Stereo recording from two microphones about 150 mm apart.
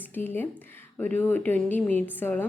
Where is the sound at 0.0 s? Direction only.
15° left (ahead or behind).